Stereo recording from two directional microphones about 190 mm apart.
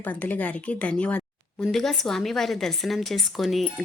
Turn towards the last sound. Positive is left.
turn(degrees=0)  # may be behind; listen again after turning